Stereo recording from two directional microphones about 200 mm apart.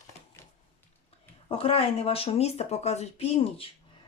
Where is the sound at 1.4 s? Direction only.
30° left (ahead or behind).